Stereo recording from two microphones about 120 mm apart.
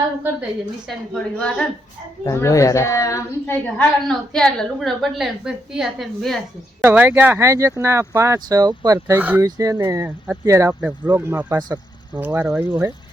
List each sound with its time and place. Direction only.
0.9 s a woman's voice: 5° left (ahead or behind)
2.2 s a woman's voice: 25° left (ahead or behind)
4.3 s a woman's voice: 5° left (ahead or behind)
6.8 s speech: 15° right (ahead or behind); by 9.1 s 30° right (ahead or behind)
9.1 s speech: 15° right (ahead or behind)
9.6 s speech: 25° right (ahead or behind)
10.8 s speech: 15° right (ahead or behind)